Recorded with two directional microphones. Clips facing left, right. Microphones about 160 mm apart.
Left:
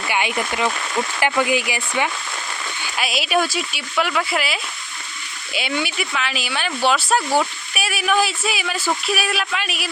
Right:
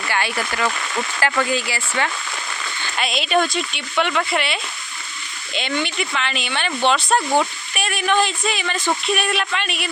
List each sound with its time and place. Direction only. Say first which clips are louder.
0.1 s speech: left 1 dB; 15° left (ahead or behind)
2.8 s speech: right 1 dB; 5° left (ahead or behind)